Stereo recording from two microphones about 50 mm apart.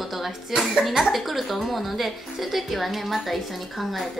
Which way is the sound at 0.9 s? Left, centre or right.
Centre.